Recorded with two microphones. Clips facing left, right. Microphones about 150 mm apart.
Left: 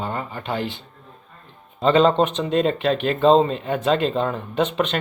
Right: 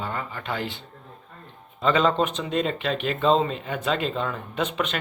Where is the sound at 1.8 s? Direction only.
30° left (ahead or behind).